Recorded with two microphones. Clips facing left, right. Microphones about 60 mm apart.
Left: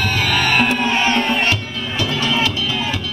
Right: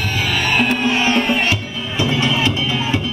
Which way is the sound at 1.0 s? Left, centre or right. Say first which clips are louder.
Right 1 dB; centre.